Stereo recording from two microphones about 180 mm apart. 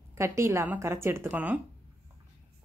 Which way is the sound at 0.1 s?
15° right (ahead or behind).